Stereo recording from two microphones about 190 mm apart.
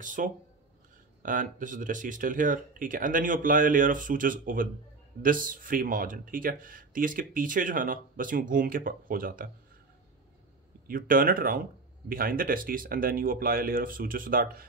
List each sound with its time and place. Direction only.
0.0 s speech: 45° right (ahead or behind)
10.9 s speech: 50° right (ahead or behind)